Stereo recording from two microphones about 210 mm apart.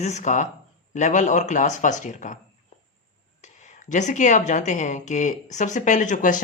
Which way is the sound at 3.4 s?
35° left (ahead or behind).